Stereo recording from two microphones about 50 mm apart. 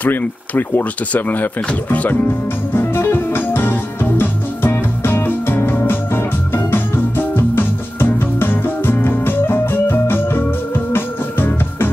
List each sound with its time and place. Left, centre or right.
0.0 s speech: left
2.7 s music: left
10.9 s organ: left